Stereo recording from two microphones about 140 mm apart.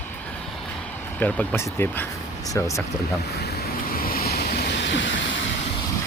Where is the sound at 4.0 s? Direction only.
90° left.